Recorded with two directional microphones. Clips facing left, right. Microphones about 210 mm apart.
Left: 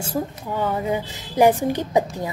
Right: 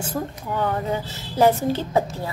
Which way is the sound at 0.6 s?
15° left (ahead or behind).